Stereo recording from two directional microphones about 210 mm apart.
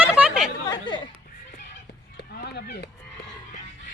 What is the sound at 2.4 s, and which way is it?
Honk, 50° left (ahead or behind).